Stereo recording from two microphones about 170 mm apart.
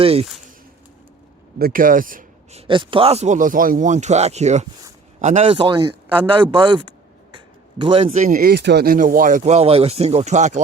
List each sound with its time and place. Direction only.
0.0 s a man's voice: 35° right (ahead or behind)
1.5 s speech: 60° right (ahead or behind)
2.5 s a man's voice: 35° right (ahead or behind)
7.3 s a sound: 30° right (ahead or behind)
8.1 s speech: 50° right (ahead or behind)